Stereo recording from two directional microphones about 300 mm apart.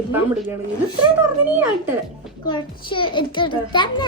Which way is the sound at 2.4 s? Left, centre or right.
Centre.